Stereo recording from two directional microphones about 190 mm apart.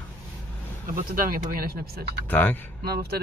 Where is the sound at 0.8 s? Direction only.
45° right (ahead or behind).